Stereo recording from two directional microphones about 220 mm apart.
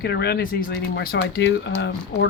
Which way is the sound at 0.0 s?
45° left (ahead or behind).